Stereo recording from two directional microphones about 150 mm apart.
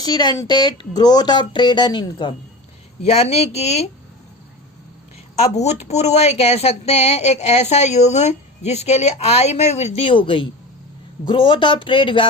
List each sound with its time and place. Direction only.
0.0 s speech: 25° left (ahead or behind)
3.0 s speech: 45° left (ahead or behind)
5.4 s speech: 50° left (ahead or behind)